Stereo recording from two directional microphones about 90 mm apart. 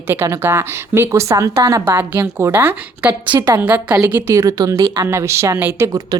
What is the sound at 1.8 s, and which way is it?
Speech, 25° right (ahead or behind).